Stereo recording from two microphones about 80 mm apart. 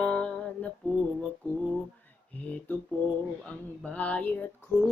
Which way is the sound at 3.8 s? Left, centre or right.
Centre.